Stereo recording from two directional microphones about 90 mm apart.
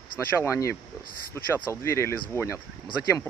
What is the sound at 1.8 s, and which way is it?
Speech, 30° left (ahead or behind).